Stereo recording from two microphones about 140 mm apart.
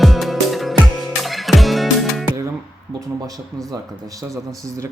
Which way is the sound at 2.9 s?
25° right (ahead or behind).